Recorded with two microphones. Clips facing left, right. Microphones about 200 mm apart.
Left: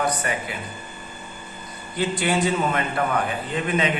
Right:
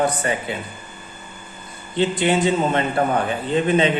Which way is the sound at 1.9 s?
25° right (ahead or behind).